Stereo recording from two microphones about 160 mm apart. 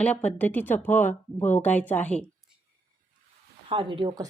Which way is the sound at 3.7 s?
30° right (ahead or behind).